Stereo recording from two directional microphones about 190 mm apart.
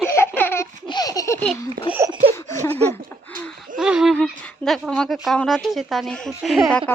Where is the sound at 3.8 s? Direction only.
5° right (ahead or behind).